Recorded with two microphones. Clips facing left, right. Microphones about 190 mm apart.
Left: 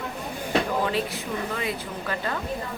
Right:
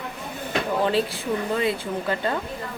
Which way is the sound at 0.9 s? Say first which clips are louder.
Right 4 dB; 30° right (ahead or behind).